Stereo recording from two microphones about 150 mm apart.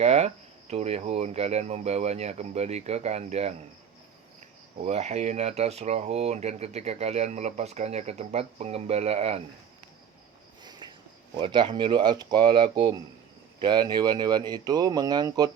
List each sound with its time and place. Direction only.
0.0 s speech: 50° right (ahead or behind)
4.8 s speech: 45° right (ahead or behind)
10.6 s a sound: 30° right (ahead or behind)
11.3 s speech: 30° right (ahead or behind)